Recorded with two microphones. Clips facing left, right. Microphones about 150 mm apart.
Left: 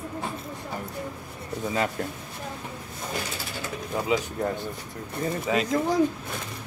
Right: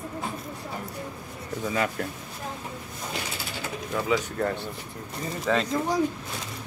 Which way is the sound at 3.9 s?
15° left (ahead or behind).